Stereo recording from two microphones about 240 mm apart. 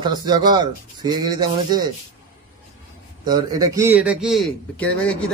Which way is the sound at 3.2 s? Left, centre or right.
Centre.